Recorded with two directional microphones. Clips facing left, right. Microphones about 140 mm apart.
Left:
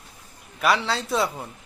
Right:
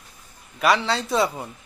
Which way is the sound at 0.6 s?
Centre (ahead or behind).